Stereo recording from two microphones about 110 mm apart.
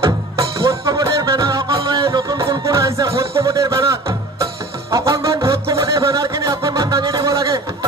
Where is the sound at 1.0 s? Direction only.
50° right (ahead or behind).